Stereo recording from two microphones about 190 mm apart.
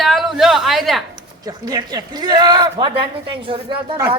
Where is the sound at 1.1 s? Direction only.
20° right (ahead or behind).